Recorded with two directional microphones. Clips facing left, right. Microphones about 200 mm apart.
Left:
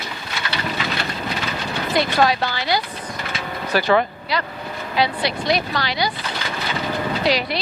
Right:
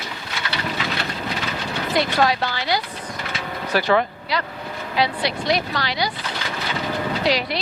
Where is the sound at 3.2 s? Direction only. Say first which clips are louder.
Left 1 dB; 10° left (ahead or behind).